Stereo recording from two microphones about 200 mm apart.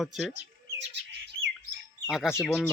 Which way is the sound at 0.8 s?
60° right (ahead or behind).